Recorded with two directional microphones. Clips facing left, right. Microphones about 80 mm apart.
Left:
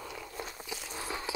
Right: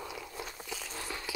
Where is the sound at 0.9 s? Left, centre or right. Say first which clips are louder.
Left 5 dB; left.